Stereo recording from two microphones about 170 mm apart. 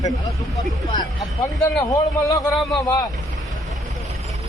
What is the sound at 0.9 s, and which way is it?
Speech, 20° left (ahead or behind).